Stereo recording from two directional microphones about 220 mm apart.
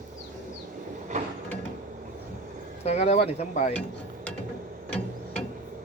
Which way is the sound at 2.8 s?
30° left (ahead or behind).